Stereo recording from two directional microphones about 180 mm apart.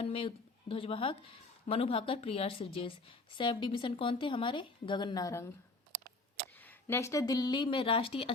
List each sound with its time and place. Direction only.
0.0 s speech: 30° left (ahead or behind)
6.6 s speech: 10° left (ahead or behind); by 8.3 s 30° left (ahead or behind)